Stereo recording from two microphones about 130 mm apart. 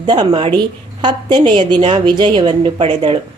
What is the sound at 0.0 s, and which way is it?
Speech, 35° right (ahead or behind).